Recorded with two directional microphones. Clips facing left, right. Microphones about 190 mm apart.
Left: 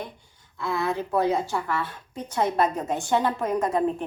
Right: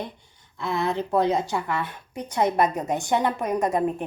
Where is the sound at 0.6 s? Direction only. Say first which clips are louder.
Right 1 dB; 20° right (ahead or behind).